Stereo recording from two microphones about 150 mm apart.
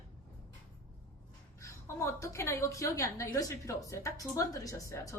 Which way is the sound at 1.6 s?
20° left (ahead or behind).